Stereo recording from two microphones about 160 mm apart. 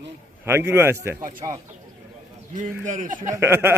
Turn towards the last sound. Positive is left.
turn(degrees=-15)  # may be behind; listen again after turning